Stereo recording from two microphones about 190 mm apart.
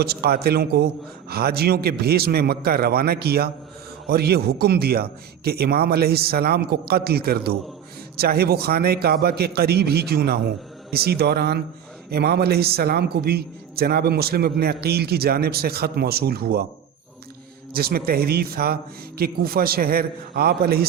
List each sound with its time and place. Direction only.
0.0 s a man's voice: 55° right (ahead or behind)
17.7 s a man's voice: 50° right (ahead or behind)